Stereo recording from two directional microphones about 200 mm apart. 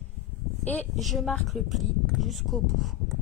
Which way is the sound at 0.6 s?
5° left (ahead or behind).